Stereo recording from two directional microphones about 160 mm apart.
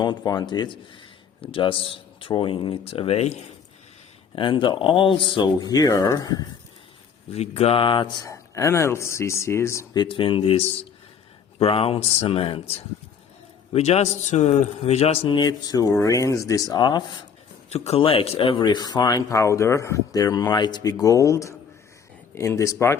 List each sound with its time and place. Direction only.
0.3 s speech: 25° left (ahead or behind)
4.4 s speech: 30° left (ahead or behind)
7.3 s speech: 40° left (ahead or behind); by 10.0 s 15° left (ahead or behind)
10.0 s speech: 30° left (ahead or behind)
11.6 s speech: 35° left (ahead or behind)
17.7 s speech: 40° left (ahead or behind); by 23.0 s 15° left (ahead or behind)